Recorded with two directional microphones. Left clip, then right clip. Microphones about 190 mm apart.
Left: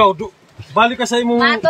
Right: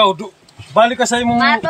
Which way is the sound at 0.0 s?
45° right (ahead or behind).